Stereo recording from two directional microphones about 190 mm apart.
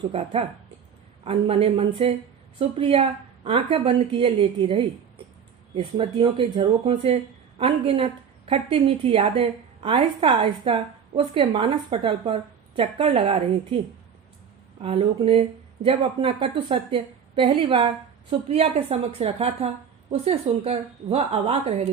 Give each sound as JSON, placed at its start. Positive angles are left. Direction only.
{"t": 0.0, "sound": "speech", "side_deg": -30}
{"t": 14.8, "sound": "speech", "side_deg": -30}